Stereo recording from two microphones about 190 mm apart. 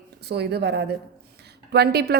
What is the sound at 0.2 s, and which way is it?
A woman's voice, 60° right (ahead or behind).